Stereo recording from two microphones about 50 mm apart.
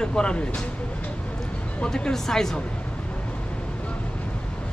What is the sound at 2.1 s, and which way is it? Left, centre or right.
Speech, centre.